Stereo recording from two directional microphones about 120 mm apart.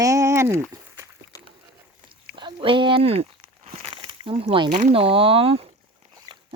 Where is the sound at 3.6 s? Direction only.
50° right (ahead or behind).